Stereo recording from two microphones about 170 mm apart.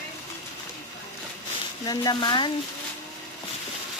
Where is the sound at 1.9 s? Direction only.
25° left (ahead or behind).